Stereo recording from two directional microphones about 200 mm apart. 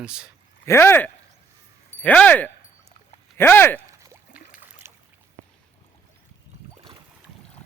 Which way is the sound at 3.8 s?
15° right (ahead or behind).